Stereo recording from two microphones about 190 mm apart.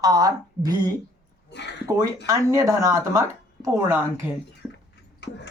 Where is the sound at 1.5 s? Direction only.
65° left (ahead or behind).